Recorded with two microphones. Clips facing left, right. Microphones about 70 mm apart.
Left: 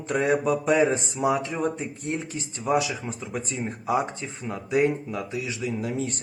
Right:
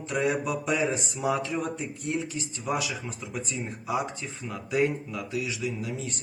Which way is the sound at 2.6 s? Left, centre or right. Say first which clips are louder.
Left 6 dB; left.